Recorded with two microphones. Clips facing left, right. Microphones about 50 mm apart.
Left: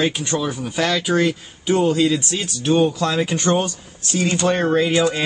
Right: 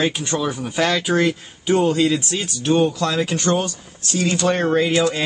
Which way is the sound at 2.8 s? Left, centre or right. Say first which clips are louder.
Left 1 dB; centre.